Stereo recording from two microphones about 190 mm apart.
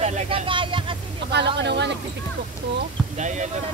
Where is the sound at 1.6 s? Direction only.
65° right (ahead or behind).